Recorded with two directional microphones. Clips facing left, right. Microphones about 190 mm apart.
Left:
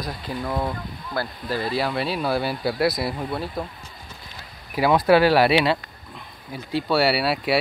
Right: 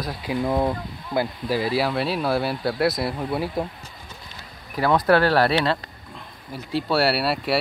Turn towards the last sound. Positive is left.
turn(degrees=0)  # may be behind; listen again after turning